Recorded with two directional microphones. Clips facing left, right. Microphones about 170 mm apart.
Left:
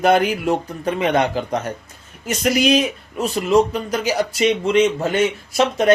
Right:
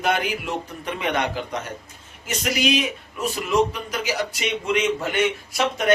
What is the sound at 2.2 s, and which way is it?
A man's voice, 40° left (ahead or behind).